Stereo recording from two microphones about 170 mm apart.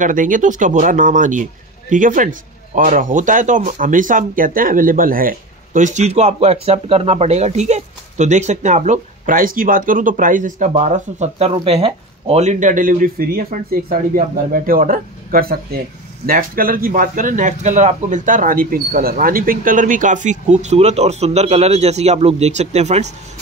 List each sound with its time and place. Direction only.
0.0 s speech: 50° right (ahead or behind)